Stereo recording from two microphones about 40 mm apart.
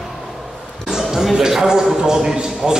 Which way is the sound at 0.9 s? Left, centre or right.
Centre.